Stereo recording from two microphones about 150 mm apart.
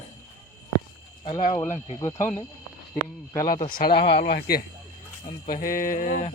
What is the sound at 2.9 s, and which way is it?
Mantra, 65° left (ahead or behind).